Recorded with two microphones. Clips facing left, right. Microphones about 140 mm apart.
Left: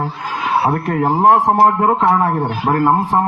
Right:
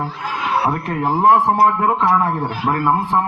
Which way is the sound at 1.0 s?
20° left (ahead or behind).